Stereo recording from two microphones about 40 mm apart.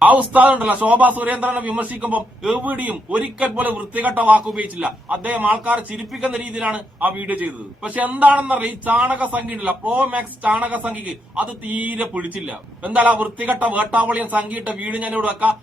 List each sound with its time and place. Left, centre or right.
0.0 s a man's voice: right
6.4 s a man's voice: right
6.7 s a man's voice: right